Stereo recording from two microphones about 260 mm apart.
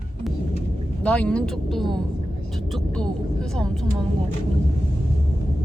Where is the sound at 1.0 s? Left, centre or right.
Centre.